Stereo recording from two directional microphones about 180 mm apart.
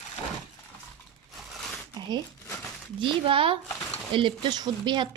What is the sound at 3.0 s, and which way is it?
Speech, 30° right (ahead or behind).